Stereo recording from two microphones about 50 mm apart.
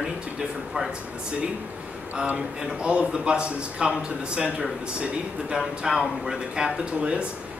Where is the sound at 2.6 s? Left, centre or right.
Right.